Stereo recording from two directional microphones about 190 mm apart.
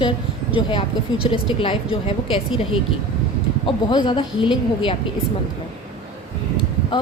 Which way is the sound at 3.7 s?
25° left (ahead or behind).